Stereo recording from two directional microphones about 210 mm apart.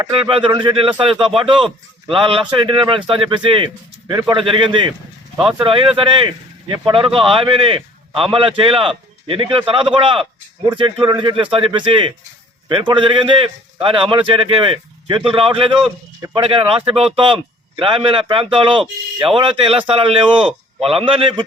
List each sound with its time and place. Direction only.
0.0 s speech: 25° right (ahead or behind)